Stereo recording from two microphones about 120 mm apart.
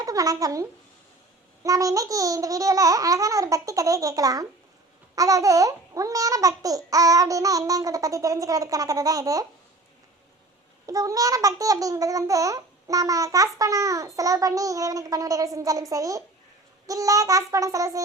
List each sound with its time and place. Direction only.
0.0 s speech: 30° right (ahead or behind)
1.6 s babbling: 30° right (ahead or behind)
10.8 s babbling: 30° right (ahead or behind)